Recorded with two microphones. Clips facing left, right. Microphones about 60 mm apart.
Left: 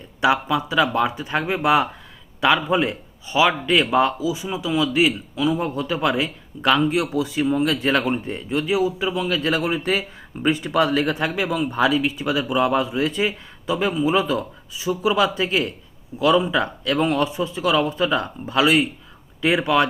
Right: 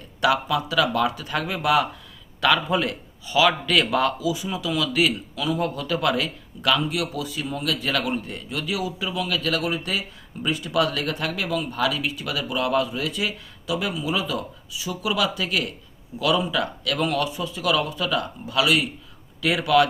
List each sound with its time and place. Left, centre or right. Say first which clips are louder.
0.2 s a man's voice: left 2 dB; left